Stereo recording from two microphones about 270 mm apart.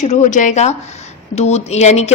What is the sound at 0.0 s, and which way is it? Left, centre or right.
A woman's voice, left.